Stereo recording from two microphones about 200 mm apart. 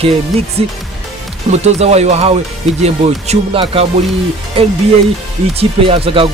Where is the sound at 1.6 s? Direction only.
35° right (ahead or behind).